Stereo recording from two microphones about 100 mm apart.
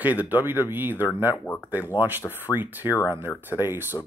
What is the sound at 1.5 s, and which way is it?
Speech, 15° left (ahead or behind).